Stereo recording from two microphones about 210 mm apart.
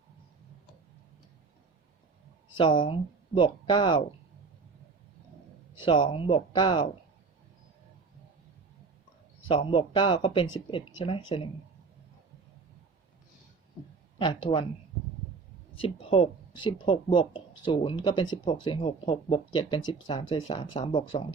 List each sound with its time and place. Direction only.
2.6 s speech: 20° left (ahead or behind)
5.8 s speech: 25° left (ahead or behind)
9.5 s speech: 25° left (ahead or behind)
14.2 s speech: 20° left (ahead or behind)
15.8 s speech: 25° left (ahead or behind)